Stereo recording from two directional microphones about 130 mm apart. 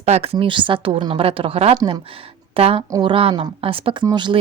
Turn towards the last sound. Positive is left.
turn(degrees=-35)  # may be behind; listen again after turning